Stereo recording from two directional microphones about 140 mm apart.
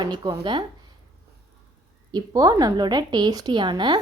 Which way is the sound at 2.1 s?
25° right (ahead or behind).